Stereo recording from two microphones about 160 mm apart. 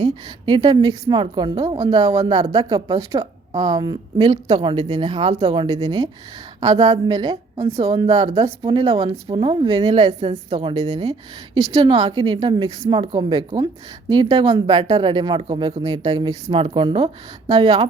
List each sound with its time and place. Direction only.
0.0 s a woman's voice: 30° right (ahead or behind)
4.5 s speech: 35° right (ahead or behind)
5.6 s a woman's voice: 25° right (ahead or behind)
9.3 s a woman's voice: 35° right (ahead or behind)
17.5 s a woman's voice: 25° right (ahead or behind)